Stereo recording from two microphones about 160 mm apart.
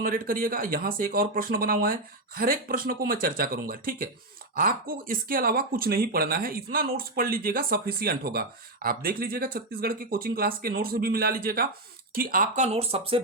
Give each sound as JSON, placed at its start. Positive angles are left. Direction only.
{"t": 0.0, "sound": "speech", "side_deg": -65}